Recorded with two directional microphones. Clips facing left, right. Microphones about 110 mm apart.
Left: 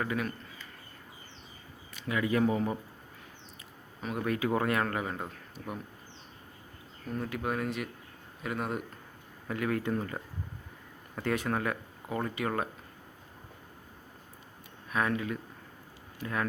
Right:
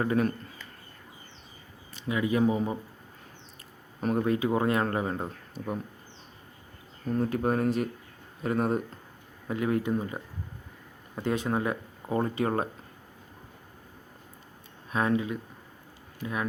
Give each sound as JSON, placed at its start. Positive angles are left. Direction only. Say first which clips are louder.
{"t": 0.0, "sound": "speech", "louder": "right 7 dB", "side_deg": -35}
{"t": 1.9, "sound": "speech", "louder": "right 2 dB", "side_deg": -25}
{"t": 4.2, "sound": "speech", "louder": "right 2 dB", "side_deg": -20}
{"t": 7.1, "sound": "speech", "louder": "right 7 dB", "side_deg": -35}
{"t": 9.5, "sound": "speech", "louder": "right 4 dB", "side_deg": -20}
{"t": 14.8, "sound": "speech", "louder": "right 4 dB", "side_deg": -25}